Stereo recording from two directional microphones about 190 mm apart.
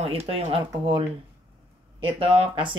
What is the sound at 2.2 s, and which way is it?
Speech, 30° right (ahead or behind).